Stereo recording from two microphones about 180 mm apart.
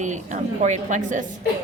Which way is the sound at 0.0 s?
40° right (ahead or behind).